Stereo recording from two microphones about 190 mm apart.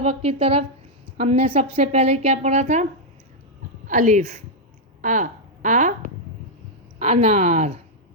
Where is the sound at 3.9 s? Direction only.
40° right (ahead or behind).